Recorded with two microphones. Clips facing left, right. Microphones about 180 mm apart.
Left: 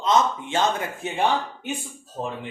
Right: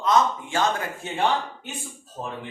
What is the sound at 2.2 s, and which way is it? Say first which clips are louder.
Speech: left 4 dB; 20° left (ahead or behind).